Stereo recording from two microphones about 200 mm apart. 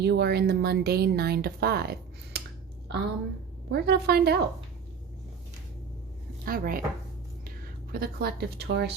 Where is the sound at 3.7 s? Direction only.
55° right (ahead or behind).